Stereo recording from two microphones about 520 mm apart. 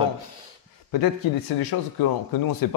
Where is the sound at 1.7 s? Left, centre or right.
Left.